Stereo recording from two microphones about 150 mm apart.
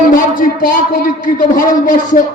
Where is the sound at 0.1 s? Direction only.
70° left (ahead or behind).